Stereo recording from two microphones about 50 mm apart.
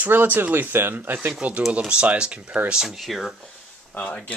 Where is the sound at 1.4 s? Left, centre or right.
Right.